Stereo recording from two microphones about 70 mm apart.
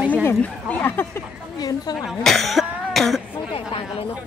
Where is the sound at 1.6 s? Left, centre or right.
Left.